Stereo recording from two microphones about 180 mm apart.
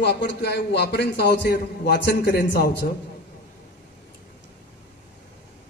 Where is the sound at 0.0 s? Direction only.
65° left (ahead or behind).